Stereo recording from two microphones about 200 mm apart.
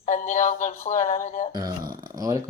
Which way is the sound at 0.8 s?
35° left (ahead or behind).